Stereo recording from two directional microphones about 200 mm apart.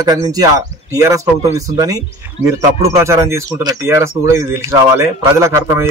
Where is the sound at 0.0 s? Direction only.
20° right (ahead or behind).